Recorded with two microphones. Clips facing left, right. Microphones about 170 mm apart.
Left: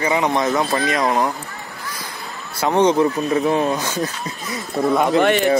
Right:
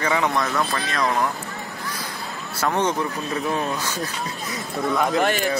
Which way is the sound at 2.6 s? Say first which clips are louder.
Left 7 dB; 20° left (ahead or behind).